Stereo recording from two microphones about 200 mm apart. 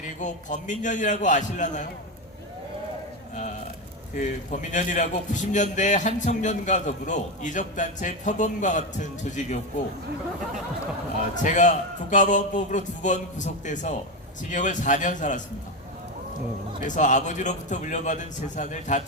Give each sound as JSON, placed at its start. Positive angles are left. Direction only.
{"t": 0.2, "sound": "a man's voice", "side_deg": 40}
{"t": 4.1, "sound": "a man's voice", "side_deg": 40}
{"t": 11.4, "sound": "a man's voice", "side_deg": 35}
{"t": 16.8, "sound": "a man's voice", "side_deg": 40}